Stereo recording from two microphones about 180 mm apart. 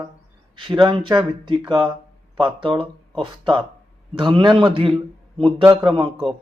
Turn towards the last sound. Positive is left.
turn(degrees=-30)  # may be behind; listen again after turning